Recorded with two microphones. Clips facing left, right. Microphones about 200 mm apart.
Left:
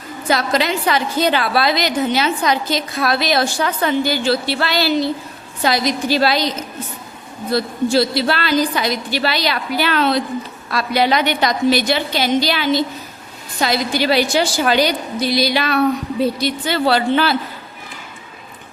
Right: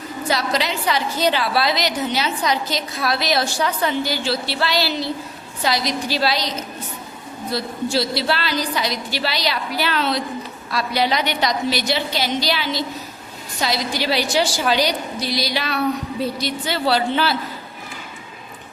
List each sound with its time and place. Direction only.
0.3 s a woman's voice: 55° left (ahead or behind)
7.5 s a woman's voice: 50° left (ahead or behind)